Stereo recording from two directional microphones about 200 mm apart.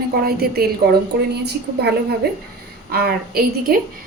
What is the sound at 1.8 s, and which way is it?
A woman's voice, 55° right (ahead or behind).